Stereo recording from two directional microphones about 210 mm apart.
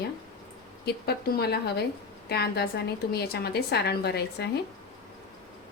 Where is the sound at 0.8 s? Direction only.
50° left (ahead or behind).